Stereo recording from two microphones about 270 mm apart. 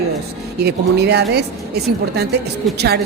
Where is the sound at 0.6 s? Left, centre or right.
Right.